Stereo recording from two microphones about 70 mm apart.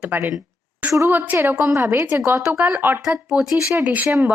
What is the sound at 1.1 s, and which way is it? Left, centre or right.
Speech, right.